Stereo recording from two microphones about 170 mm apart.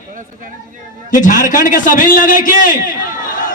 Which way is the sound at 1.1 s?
50° left (ahead or behind).